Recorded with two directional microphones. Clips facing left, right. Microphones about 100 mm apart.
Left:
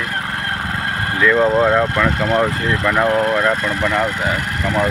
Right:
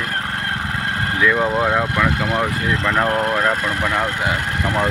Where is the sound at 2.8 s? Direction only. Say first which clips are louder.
Left 4 dB; centre (ahead or behind); by 4.9 s 15° right (ahead or behind).